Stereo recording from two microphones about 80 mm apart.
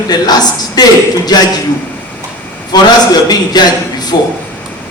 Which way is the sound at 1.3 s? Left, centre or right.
Left.